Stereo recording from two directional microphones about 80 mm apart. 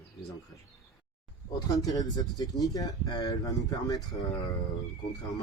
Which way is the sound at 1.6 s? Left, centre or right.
Left.